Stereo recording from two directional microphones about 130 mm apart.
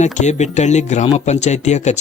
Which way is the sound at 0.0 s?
65° left (ahead or behind).